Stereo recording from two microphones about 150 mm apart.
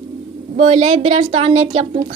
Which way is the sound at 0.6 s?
45° right (ahead or behind).